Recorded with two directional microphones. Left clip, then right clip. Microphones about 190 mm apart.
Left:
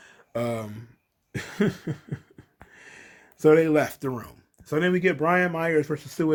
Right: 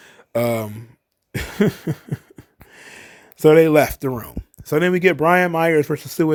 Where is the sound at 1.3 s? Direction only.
45° right (ahead or behind).